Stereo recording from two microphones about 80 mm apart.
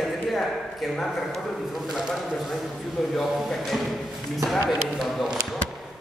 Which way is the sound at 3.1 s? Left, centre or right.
Centre.